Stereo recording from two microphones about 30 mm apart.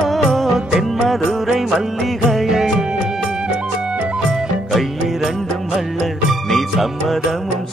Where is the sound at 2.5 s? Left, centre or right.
Centre.